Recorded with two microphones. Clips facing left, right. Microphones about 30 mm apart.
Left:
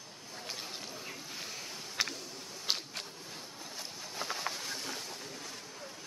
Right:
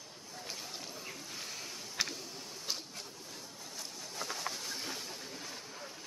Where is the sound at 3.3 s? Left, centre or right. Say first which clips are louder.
Left 2 dB; left.